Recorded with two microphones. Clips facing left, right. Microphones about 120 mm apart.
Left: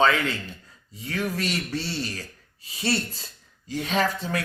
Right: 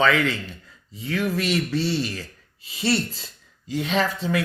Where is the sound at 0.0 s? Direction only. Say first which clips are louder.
Right 1 dB; 30° left (ahead or behind).